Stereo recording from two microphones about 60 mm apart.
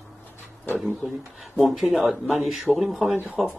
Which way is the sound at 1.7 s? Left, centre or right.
Centre.